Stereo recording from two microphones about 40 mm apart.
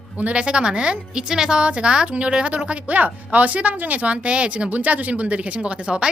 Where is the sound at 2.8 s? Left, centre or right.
Right.